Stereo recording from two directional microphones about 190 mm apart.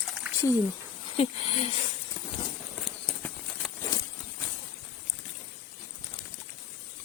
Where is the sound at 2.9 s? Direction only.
Centre (ahead or behind).